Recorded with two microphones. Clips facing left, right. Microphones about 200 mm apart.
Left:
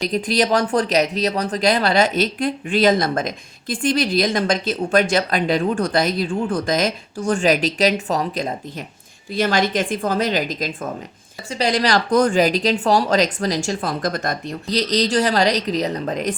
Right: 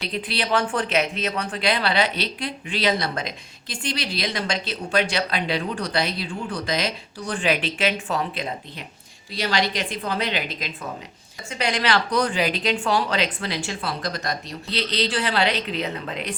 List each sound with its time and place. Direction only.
0.1 s speech: 45° left (ahead or behind)